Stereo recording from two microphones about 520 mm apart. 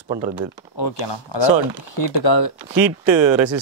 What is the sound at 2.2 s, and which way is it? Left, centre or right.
Speech, left.